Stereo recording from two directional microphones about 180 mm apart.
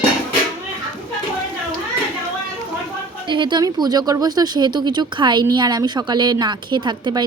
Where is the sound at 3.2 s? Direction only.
25° right (ahead or behind).